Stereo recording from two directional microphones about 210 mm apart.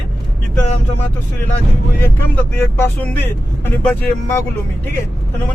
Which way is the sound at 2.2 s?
10° left (ahead or behind).